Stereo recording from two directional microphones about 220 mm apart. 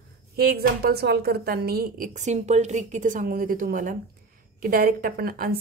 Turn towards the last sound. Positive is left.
turn(degrees=-45)  # may be behind; listen again after turning